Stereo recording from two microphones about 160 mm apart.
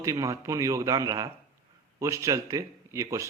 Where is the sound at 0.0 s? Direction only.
20° right (ahead or behind).